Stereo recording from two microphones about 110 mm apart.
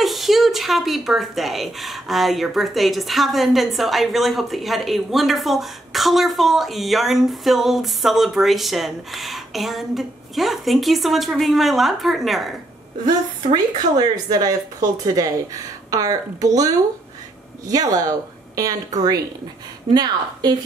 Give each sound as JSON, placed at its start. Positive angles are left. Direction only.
{"t": 0.0, "sound": "speech", "side_deg": 0}
{"t": 13.0, "sound": "speech", "side_deg": -45}